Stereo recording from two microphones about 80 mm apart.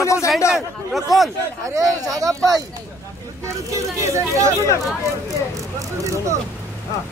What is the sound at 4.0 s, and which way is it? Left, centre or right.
Speech, right.